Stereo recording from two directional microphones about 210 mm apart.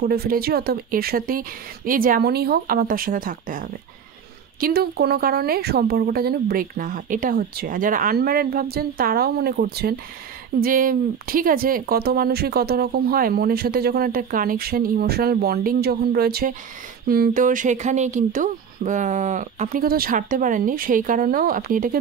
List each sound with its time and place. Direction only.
0.0 s speech: 45° right (ahead or behind)